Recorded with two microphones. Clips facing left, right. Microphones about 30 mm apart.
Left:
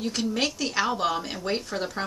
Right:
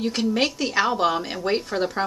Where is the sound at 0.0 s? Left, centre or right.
Centre.